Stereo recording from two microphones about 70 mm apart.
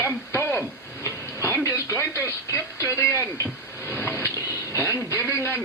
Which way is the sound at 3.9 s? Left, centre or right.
Left.